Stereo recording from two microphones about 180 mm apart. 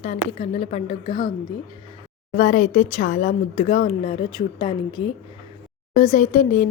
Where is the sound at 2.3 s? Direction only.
50° left (ahead or behind); by 5.1 s 30° left (ahead or behind).